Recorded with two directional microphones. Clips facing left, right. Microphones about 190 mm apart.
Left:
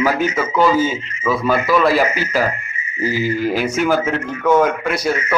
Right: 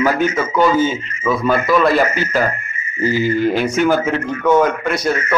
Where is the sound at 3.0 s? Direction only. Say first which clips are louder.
Right 3 dB; 5° left (ahead or behind).